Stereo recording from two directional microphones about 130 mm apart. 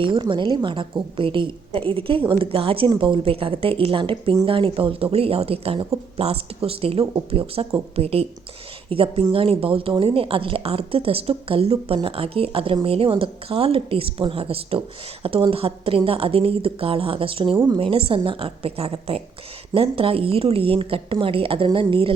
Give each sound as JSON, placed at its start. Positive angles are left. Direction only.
{"t": 0.0, "sound": "a woman's voice", "side_deg": -40}